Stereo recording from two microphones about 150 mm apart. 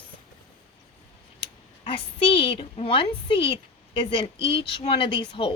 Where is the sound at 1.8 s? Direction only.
40° left (ahead or behind).